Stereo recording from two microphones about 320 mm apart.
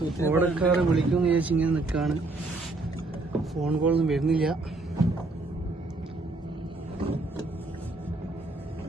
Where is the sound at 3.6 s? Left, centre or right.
Centre.